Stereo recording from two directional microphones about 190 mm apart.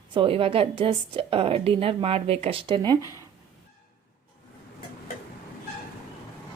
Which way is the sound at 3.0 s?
20° left (ahead or behind).